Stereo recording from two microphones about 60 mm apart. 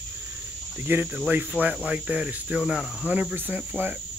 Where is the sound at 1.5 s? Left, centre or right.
Right.